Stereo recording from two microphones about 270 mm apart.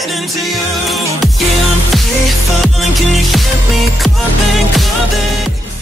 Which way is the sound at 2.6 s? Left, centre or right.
Centre.